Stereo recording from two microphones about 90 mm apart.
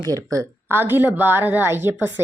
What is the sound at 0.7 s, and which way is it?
A woman's voice, 25° right (ahead or behind).